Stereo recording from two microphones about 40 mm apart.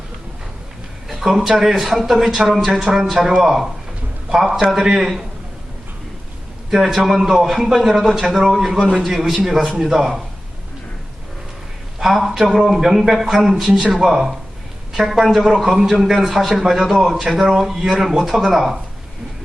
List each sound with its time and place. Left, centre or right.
1.0 s a man's voice: centre
4.9 s a man's voice: centre
6.7 s a man's voice: centre
11.9 s a man's voice: centre
17.2 s a man's voice: centre
17.7 s a man's voice: centre